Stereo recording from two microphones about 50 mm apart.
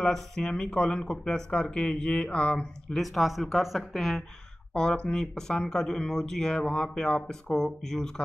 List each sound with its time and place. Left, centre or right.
0.0 s speech: centre
3.0 s speech: centre
4.7 s speech: centre